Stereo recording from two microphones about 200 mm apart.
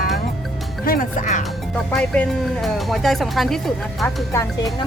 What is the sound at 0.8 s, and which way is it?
Speech, 40° left (ahead or behind).